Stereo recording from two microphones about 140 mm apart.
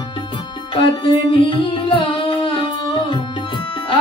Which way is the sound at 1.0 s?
35° left (ahead or behind).